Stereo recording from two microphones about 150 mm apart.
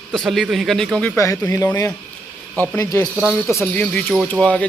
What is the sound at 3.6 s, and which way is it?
Speech, 10° left (ahead or behind).